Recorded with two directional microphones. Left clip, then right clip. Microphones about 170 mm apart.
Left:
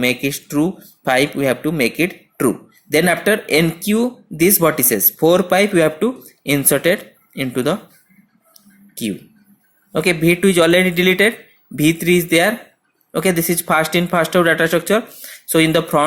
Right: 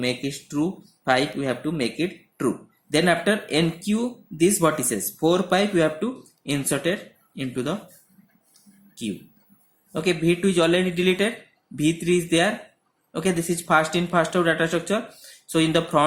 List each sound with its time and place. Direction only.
0.0 s speech: 45° left (ahead or behind)
9.9 s speech: 40° left (ahead or behind)